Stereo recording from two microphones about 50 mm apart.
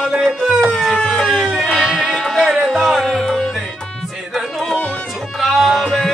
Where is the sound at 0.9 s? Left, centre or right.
Centre.